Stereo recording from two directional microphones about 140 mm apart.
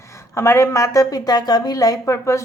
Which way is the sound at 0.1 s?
20° left (ahead or behind).